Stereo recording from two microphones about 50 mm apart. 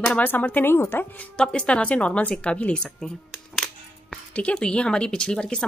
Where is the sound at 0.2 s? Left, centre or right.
Left.